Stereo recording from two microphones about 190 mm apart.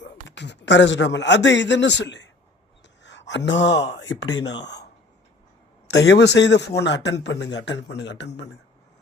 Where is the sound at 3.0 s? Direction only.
70° left (ahead or behind).